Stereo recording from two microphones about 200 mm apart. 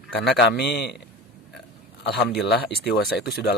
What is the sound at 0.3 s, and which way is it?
Speech, 55° left (ahead or behind).